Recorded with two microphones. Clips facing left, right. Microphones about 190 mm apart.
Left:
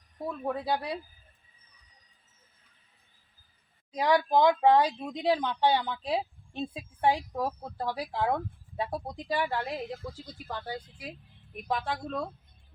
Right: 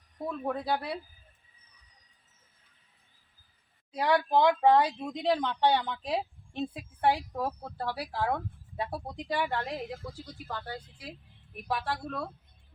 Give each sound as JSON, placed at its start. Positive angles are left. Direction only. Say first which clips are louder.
{"t": 0.3, "sound": "speech", "louder": "even", "side_deg": 5}
{"t": 3.9, "sound": "speech", "louder": "left 1 dB", "side_deg": 15}
{"t": 10.0, "sound": "speech", "louder": "left 2 dB", "side_deg": -10}
{"t": 10.5, "sound": "speech", "louder": "left 2 dB", "side_deg": 15}